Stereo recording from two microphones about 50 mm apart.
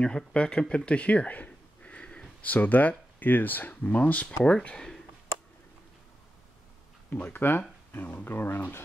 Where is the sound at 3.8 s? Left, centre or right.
Left.